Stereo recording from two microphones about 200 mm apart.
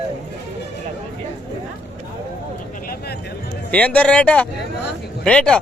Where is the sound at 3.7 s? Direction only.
5° left (ahead or behind).